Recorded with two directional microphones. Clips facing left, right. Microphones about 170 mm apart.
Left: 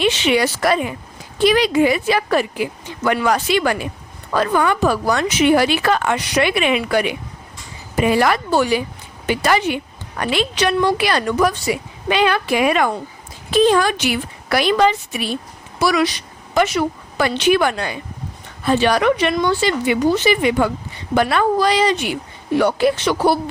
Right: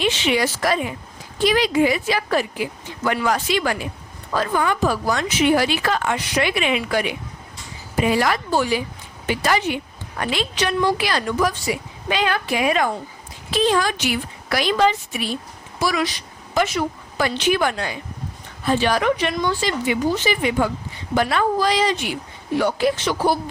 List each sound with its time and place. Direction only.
0.0 s a woman's voice: 70° left (ahead or behind)
13.5 s a woman's voice: 50° left (ahead or behind); by 23.4 s 70° left (ahead or behind)